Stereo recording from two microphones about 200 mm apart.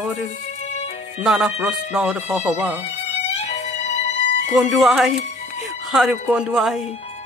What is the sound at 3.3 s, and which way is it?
Music, 35° left (ahead or behind).